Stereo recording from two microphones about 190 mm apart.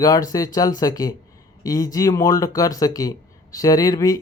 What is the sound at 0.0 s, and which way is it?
Speech, 20° left (ahead or behind).